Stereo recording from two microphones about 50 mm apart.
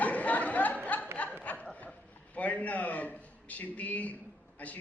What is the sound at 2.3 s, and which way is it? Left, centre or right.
A man's voice, left.